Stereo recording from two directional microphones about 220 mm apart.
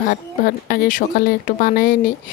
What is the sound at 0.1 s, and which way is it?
Speech, 40° left (ahead or behind).